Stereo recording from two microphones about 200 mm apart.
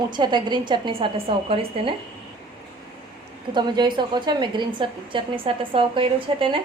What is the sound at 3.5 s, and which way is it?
A woman's voice, 20° right (ahead or behind).